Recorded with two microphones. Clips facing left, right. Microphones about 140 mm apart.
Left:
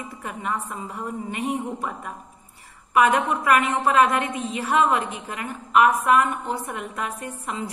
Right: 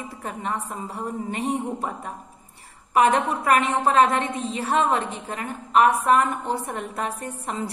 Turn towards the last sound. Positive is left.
turn(degrees=-35)  # may be behind; listen again after turning